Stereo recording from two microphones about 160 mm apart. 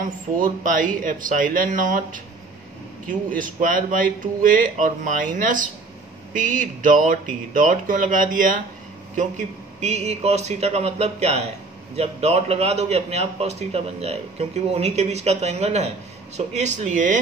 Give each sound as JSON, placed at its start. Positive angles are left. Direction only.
{"t": 0.0, "sound": "a man's voice", "side_deg": -55}